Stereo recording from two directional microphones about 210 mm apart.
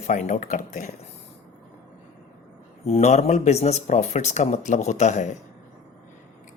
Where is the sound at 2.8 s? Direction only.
30° left (ahead or behind).